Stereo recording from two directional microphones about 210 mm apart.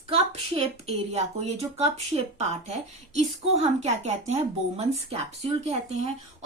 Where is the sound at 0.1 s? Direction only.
30° right (ahead or behind).